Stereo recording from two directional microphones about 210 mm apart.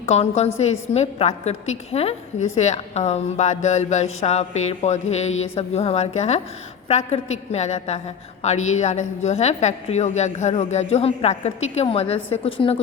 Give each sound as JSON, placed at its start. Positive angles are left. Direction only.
{"t": 0.0, "sound": "a woman's voice", "side_deg": 30}